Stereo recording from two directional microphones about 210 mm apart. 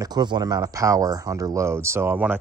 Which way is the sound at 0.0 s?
20° right (ahead or behind).